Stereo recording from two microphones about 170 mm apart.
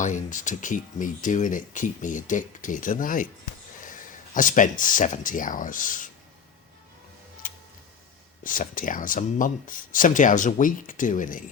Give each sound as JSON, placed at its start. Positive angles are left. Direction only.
{"t": 0.0, "sound": "speech", "side_deg": 50}
{"t": 4.4, "sound": "speech", "side_deg": 50}
{"t": 8.4, "sound": "speech", "side_deg": 50}